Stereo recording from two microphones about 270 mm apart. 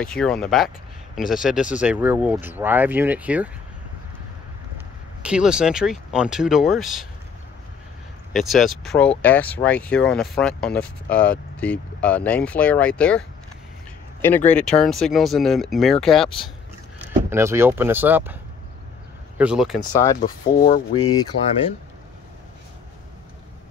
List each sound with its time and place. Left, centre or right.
0.0 s speech: centre
5.2 s speech: centre
8.3 s speech: centre
14.5 s speech: centre
19.9 s speech: centre
21.3 s speech: left